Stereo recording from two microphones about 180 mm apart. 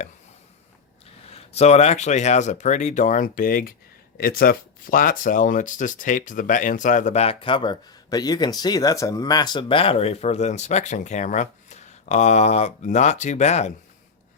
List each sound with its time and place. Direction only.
1.3 s speech: 35° left (ahead or behind)